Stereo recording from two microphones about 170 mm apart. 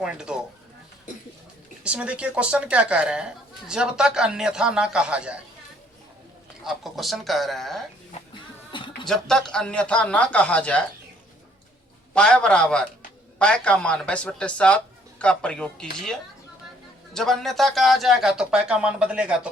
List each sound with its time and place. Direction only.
0.0 s a woman's voice: 5° right (ahead or behind)
1.8 s a woman's voice: 5° right (ahead or behind)
6.7 s a woman's voice: centre (ahead or behind)
8.7 s music: 30° left (ahead or behind)
9.0 s speech: 5° left (ahead or behind)
12.1 s a woman's voice: 5° left (ahead or behind)
17.2 s a woman's voice: centre (ahead or behind)